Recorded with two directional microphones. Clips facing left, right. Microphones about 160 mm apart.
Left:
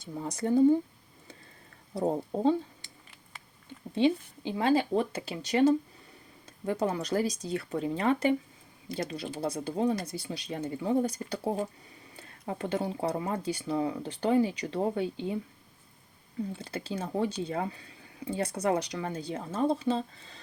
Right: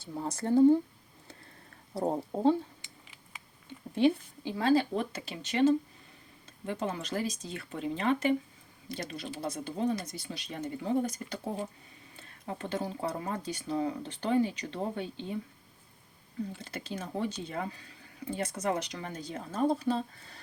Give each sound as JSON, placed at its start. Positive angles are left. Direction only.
{"t": 0.0, "sound": "speech", "side_deg": 15}
{"t": 2.0, "sound": "a woman's voice", "side_deg": 20}
{"t": 3.9, "sound": "a woman's voice", "side_deg": 20}
{"t": 4.9, "sound": "speech", "side_deg": 35}
{"t": 12.8, "sound": "speech", "side_deg": 30}
{"t": 16.5, "sound": "speech", "side_deg": 30}